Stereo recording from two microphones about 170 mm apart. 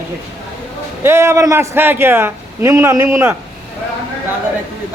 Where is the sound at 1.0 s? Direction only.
15° right (ahead or behind).